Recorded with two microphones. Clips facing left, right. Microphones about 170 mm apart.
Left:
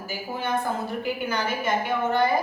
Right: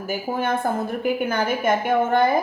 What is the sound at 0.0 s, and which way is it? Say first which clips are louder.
A woman's voice: right 6 dB; 50° right (ahead or behind).